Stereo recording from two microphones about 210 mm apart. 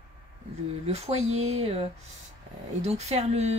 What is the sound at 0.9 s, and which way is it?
Speech, 30° right (ahead or behind).